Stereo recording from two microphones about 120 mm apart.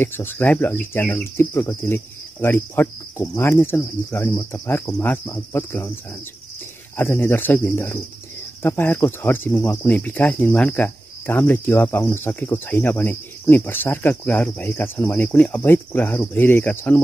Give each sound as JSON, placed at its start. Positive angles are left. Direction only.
{"t": 0.0, "sound": "speech", "side_deg": 20}
{"t": 7.0, "sound": "speech", "side_deg": 20}